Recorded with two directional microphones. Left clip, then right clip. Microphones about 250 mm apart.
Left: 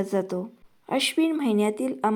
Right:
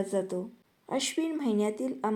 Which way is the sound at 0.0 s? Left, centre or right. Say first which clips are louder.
Left 4 dB; centre.